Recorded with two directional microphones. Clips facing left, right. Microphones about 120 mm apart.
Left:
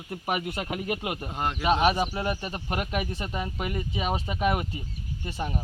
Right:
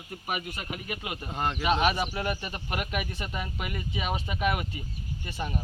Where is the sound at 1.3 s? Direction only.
10° left (ahead or behind).